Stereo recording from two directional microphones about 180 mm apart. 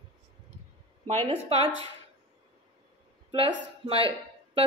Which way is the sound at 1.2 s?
35° right (ahead or behind).